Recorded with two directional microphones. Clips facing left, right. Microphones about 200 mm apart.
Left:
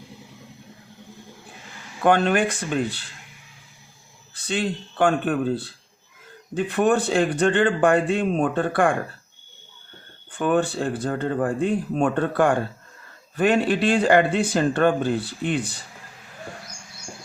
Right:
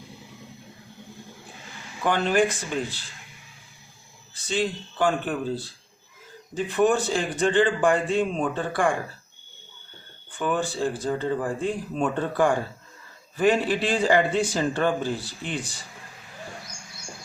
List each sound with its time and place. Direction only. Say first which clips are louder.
2.0 s speech: left 3 dB; 60° left (ahead or behind)
4.4 s speech: left 1 dB; 60° left (ahead or behind)
10.3 s speech: left 5 dB; 60° left (ahead or behind)